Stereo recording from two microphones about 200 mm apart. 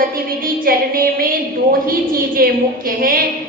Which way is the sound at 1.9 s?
45° right (ahead or behind).